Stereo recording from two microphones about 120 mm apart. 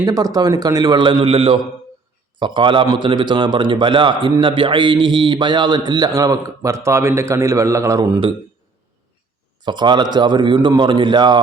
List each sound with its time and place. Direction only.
0.0 s a man's voice: 30° right (ahead or behind)
9.6 s a man's voice: 40° right (ahead or behind)